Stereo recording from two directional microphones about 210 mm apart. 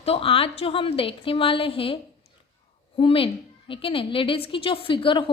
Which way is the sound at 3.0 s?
25° left (ahead or behind).